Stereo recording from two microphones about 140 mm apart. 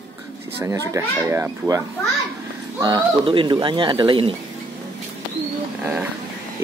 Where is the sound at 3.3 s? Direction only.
35° right (ahead or behind).